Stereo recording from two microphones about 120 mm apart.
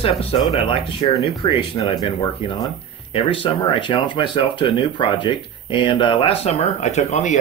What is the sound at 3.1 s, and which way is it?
Speech, 45° left (ahead or behind).